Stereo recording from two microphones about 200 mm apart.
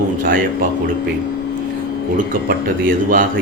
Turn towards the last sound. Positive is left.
turn(degrees=-45)  # may be behind; listen again after turning